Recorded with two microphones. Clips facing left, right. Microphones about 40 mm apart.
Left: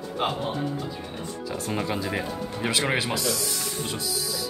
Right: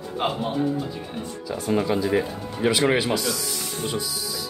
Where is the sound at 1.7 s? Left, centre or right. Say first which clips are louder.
Right 7 dB; centre.